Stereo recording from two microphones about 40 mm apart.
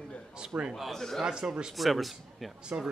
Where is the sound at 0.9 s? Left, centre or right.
Centre.